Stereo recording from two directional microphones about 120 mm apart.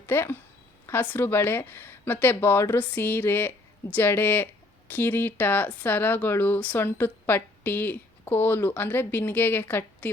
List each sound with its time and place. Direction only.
0.0 s speech: 20° left (ahead or behind)